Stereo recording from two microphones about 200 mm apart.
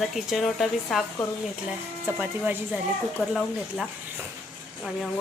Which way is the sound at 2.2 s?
5° right (ahead or behind).